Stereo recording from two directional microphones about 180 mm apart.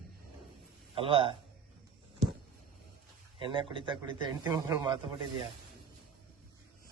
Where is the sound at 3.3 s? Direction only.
30° right (ahead or behind).